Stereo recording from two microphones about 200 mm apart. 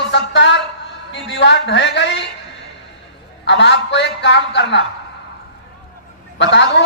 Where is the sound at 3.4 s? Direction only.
60° left (ahead or behind).